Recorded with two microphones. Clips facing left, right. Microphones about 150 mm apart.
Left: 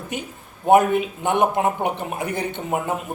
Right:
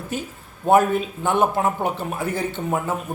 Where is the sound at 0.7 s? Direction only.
20° left (ahead or behind).